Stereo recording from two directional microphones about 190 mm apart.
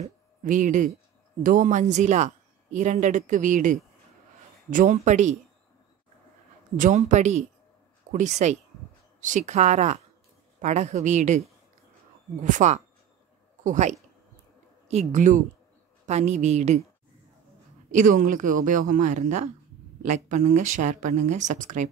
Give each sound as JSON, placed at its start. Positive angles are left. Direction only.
{"t": 0.0, "sound": "a woman's voice", "side_deg": -40}
{"t": 6.8, "sound": "a woman's voice", "side_deg": -40}
{"t": 12.4, "sound": "a woman's voice", "side_deg": -40}
{"t": 17.9, "sound": "a woman's voice", "side_deg": -45}